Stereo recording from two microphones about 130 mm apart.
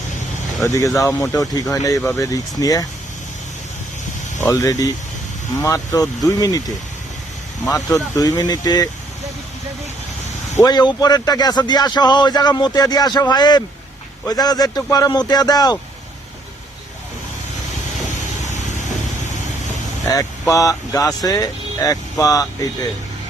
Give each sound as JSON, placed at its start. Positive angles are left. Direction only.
{"t": 0.6, "sound": "speech", "side_deg": 25}
{"t": 4.4, "sound": "speech", "side_deg": 20}
{"t": 7.9, "sound": "speech", "side_deg": 30}
{"t": 10.6, "sound": "speech", "side_deg": 30}
{"t": 20.5, "sound": "speech", "side_deg": 25}